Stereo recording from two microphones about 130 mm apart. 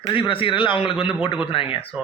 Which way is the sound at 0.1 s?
40° left (ahead or behind).